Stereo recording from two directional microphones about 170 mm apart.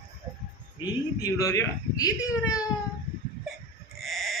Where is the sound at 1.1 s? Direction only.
20° left (ahead or behind).